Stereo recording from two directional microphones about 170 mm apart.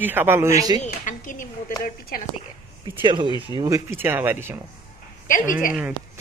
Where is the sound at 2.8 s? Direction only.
25° right (ahead or behind).